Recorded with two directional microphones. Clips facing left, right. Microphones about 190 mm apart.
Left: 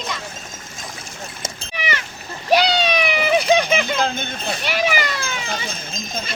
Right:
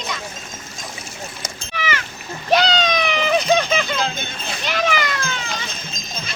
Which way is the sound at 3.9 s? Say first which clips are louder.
Left 2 dB; 50° left (ahead or behind).